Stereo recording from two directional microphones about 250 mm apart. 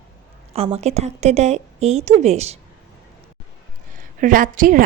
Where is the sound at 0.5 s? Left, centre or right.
Right.